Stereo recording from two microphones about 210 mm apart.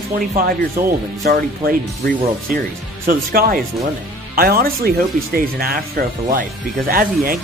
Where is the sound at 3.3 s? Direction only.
45° right (ahead or behind).